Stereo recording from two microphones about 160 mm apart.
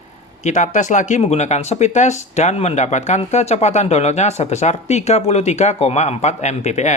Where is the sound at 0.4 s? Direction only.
50° left (ahead or behind).